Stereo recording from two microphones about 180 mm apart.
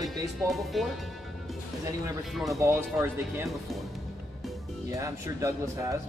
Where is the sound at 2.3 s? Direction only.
Centre (ahead or behind).